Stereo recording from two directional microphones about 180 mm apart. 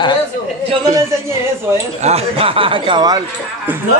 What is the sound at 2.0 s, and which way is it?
Speech, 35° right (ahead or behind).